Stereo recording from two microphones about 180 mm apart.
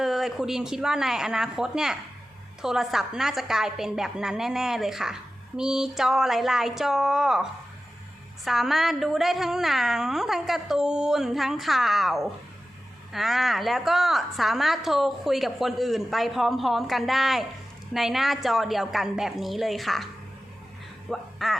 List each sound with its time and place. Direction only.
0.0 s a woman's voice: centre (ahead or behind)
8.4 s a woman's voice: centre (ahead or behind)
21.1 s speech: centre (ahead or behind)